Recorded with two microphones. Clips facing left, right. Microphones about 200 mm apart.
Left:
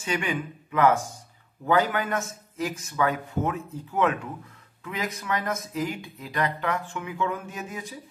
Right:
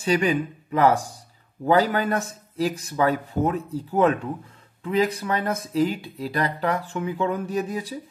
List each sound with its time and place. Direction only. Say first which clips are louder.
0.0 s speech: right 7 dB; 35° right (ahead or behind)